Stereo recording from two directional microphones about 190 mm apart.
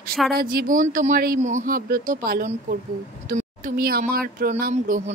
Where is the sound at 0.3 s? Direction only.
55° right (ahead or behind).